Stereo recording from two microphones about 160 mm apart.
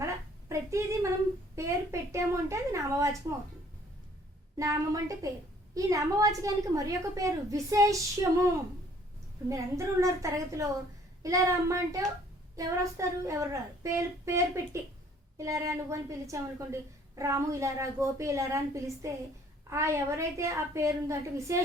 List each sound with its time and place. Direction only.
0.0 s a sound: 20° right (ahead or behind)
1.5 s a woman's voice: 20° right (ahead or behind)
4.5 s a woman's voice: 20° right (ahead or behind)
9.5 s a woman's voice: 20° right (ahead or behind)